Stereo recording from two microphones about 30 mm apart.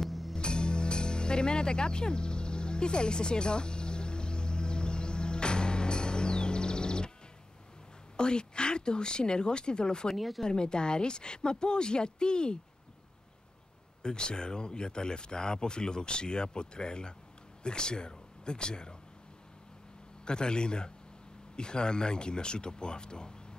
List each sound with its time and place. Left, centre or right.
0.0 s music: centre
0.4 s music: left
8.2 s speech: left
10.1 s speech: centre
10.4 s speech: left
14.0 s speech: left
20.2 s speech: left